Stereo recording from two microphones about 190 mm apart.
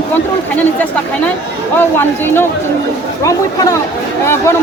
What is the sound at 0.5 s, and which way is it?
Speech, 10° left (ahead or behind).